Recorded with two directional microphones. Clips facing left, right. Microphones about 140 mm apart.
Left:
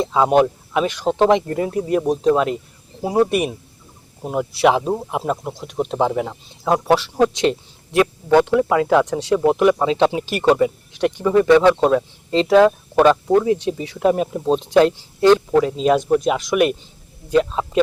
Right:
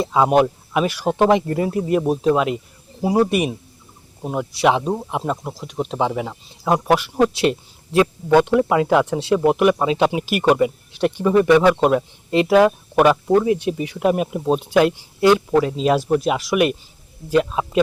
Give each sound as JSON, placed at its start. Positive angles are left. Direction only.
{"t": 0.0, "sound": "speech", "side_deg": -5}
{"t": 6.7, "sound": "speech", "side_deg": -10}
{"t": 13.5, "sound": "speech", "side_deg": 25}
{"t": 13.8, "sound": "speech", "side_deg": -15}
{"t": 15.6, "sound": "speech", "side_deg": 0}